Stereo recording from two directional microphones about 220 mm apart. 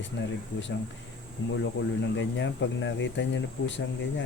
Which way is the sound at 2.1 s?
55° left (ahead or behind).